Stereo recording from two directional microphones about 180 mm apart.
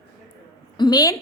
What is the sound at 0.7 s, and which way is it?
Speech, 25° left (ahead or behind).